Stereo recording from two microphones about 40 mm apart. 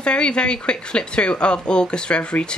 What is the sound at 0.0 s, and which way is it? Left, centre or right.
Speech, left.